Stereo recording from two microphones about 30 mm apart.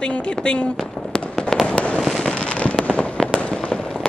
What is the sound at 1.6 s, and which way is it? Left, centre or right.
Fireworks, left.